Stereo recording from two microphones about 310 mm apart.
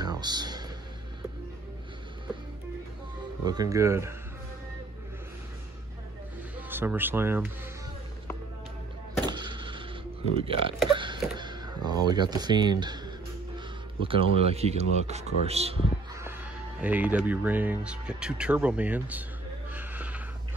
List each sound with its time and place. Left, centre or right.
0.0 s music: centre
3.4 s speech: centre
6.7 s speech: centre
9.2 s a sound: centre
10.3 s speech: centre
10.9 s a sound: centre
11.3 s speech: centre
16.8 s speech: centre
19.7 s a sound: centre